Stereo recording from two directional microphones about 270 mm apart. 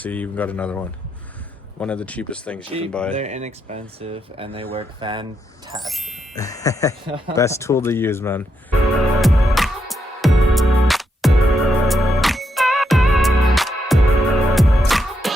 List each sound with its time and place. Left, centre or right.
0.0 s speech: centre
2.6 s speech: right
2.9 s speech: centre
3.2 s speech: right
5.8 s speech: centre
6.3 s speech: centre
7.0 s speech: centre
7.3 s speech: centre
9.2 s music: centre